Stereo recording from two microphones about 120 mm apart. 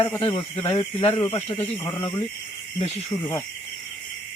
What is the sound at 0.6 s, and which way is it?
Speech, 30° left (ahead or behind).